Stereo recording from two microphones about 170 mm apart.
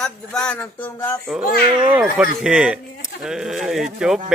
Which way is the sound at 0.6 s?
10° left (ahead or behind).